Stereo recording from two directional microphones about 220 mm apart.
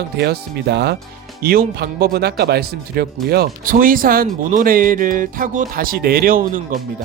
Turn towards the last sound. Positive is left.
turn(degrees=-40)  # may be behind; listen again after turning